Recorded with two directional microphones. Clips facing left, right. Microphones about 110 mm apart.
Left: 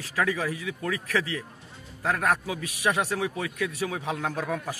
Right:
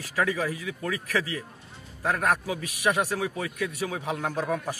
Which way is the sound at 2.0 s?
15° right (ahead or behind).